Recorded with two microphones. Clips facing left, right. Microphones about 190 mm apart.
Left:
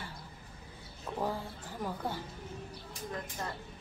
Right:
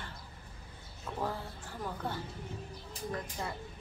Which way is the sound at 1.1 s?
15° left (ahead or behind).